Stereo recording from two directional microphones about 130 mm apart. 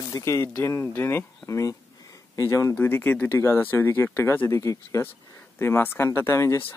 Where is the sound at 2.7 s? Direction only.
15° left (ahead or behind).